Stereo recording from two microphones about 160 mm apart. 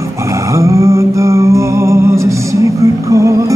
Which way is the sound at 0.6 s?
20° right (ahead or behind).